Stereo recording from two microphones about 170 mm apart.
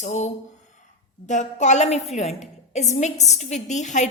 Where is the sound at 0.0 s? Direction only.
45° left (ahead or behind).